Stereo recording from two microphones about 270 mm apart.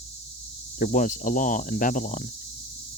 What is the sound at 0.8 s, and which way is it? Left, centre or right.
Speech, left.